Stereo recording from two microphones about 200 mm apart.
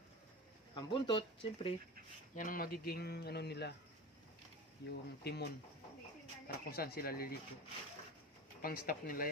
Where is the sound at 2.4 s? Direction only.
45° left (ahead or behind).